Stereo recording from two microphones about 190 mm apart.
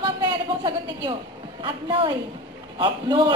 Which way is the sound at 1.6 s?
25° right (ahead or behind).